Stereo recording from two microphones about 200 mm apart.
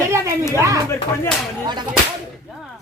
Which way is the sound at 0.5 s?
15° right (ahead or behind).